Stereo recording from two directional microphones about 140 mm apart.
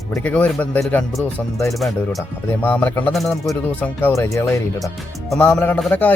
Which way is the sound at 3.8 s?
20° left (ahead or behind).